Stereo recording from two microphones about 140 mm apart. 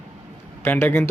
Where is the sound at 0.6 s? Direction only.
15° left (ahead or behind).